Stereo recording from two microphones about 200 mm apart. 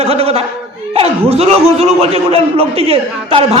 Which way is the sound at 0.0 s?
30° right (ahead or behind).